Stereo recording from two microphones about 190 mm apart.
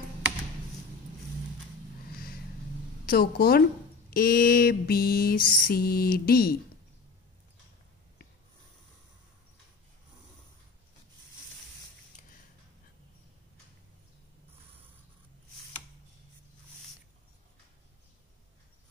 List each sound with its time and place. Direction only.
3.1 s a woman's voice: 55° left (ahead or behind)
4.1 s mantra: 50° left (ahead or behind)